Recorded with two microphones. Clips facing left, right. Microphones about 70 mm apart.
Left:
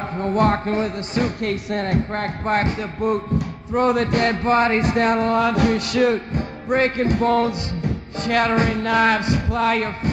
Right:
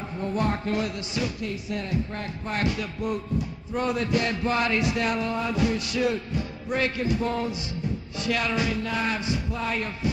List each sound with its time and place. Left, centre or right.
0.1 s a man's voice: left
0.7 s speech: left
1.4 s speech: left
5.4 s music: left
8.2 s music: left